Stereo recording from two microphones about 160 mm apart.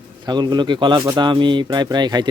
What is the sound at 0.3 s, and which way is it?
Speech, 25° right (ahead or behind).